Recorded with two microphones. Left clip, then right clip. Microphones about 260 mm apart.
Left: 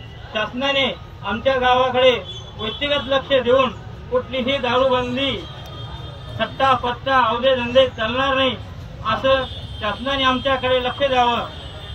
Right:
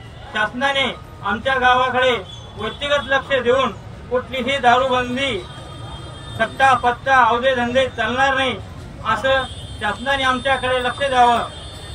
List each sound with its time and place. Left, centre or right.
0.3 s speech: centre
6.3 s a man's voice: centre